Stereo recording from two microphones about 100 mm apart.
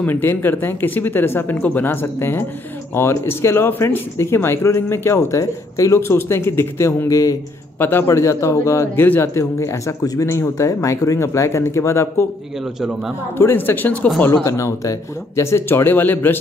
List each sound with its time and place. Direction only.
0.0 s speech: 20° left (ahead or behind)
13.4 s speech: 20° left (ahead or behind)